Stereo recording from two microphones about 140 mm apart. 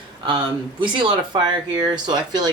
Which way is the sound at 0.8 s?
35° right (ahead or behind).